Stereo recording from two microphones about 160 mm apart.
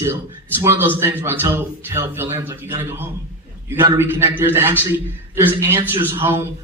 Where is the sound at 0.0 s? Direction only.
20° right (ahead or behind).